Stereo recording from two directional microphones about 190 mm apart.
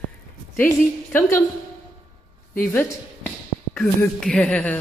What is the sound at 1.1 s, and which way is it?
Speech, 10° left (ahead or behind).